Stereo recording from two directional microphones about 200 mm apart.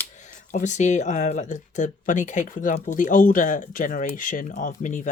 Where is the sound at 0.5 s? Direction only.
40° left (ahead or behind).